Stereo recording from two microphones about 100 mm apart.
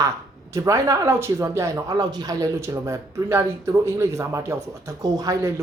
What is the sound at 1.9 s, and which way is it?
Speech, 45° right (ahead or behind).